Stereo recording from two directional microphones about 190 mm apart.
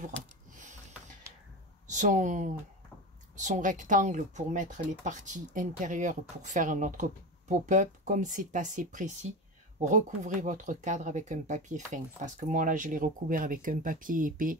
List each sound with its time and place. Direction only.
1.9 s speech: 40° right (ahead or behind)